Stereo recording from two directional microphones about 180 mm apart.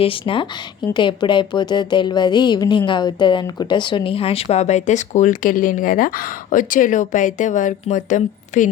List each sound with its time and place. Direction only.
0.0 s a woman's voice: 30° left (ahead or behind)